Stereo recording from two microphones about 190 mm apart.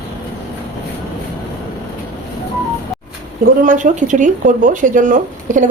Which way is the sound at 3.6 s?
40° right (ahead or behind).